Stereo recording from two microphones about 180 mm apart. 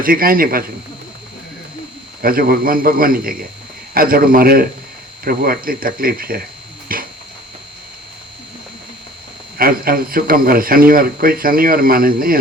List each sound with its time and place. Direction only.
0.0 s speech: 55° right (ahead or behind)
2.2 s speech: 55° right (ahead or behind)
6.9 s a sound: 50° right (ahead or behind)
9.6 s speech: 55° right (ahead or behind)